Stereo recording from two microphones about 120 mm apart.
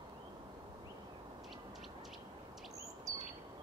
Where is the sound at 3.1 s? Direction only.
25° right (ahead or behind).